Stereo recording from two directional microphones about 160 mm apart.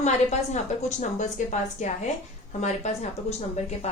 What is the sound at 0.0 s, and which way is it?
A woman's voice, 45° left (ahead or behind).